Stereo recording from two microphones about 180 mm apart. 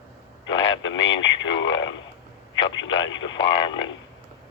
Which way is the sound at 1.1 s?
25° left (ahead or behind).